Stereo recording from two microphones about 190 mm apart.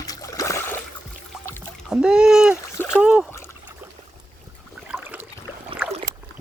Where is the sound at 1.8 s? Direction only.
5° right (ahead or behind).